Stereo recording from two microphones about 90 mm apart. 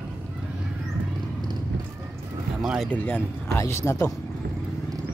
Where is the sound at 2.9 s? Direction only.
20° left (ahead or behind).